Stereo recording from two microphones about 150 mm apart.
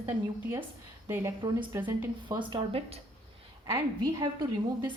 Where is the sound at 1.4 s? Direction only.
30° right (ahead or behind).